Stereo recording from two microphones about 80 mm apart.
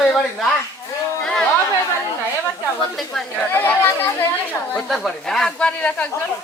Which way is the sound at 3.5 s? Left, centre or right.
Left.